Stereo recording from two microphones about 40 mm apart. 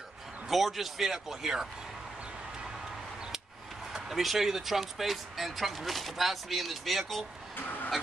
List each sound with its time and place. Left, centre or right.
0.5 s speech: centre
3.9 s speech: centre
7.5 s a sound: left